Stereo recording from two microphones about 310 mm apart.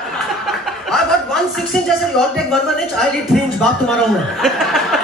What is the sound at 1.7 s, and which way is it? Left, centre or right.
Music, centre.